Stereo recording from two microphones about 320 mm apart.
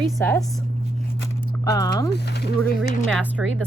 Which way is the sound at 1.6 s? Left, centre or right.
Centre.